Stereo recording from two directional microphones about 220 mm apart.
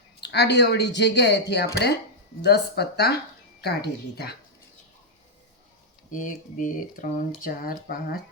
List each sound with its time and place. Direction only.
0.2 s speech: 50° left (ahead or behind)
6.1 s speech: 35° left (ahead or behind)